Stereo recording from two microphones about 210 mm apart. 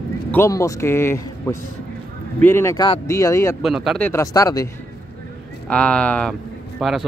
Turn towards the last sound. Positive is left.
turn(degrees=0)  # may be behind; listen again after turning